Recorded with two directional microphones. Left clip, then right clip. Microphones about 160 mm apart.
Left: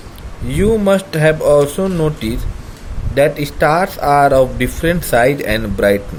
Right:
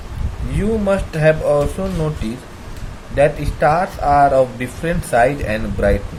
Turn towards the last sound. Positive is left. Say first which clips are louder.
# left 4 dB
turn(degrees=60)  # may be behind; listen again after turning